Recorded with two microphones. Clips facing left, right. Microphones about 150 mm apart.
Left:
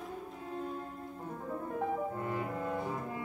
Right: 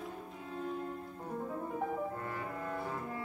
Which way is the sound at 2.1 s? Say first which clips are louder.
Left 4 dB; 20° left (ahead or behind).